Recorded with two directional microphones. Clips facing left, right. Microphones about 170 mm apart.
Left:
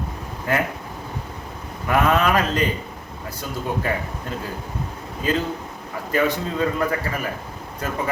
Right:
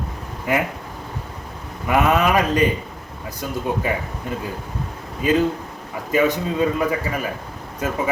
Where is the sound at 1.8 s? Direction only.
15° right (ahead or behind).